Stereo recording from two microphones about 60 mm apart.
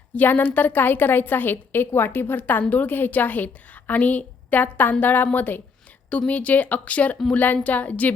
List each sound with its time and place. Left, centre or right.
0.2 s a woman's voice: left